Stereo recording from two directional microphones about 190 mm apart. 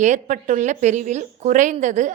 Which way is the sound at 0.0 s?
40° right (ahead or behind).